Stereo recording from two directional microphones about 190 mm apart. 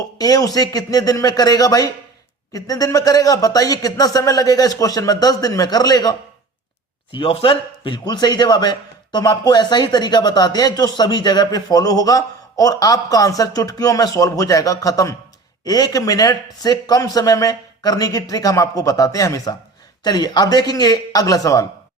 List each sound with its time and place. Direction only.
0.0 s a man's voice: 20° left (ahead or behind)